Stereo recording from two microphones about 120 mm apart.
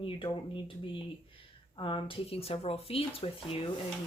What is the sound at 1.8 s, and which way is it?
Speech, 45° left (ahead or behind).